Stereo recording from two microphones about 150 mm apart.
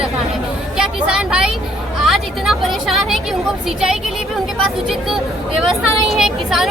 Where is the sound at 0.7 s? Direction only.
5° right (ahead or behind).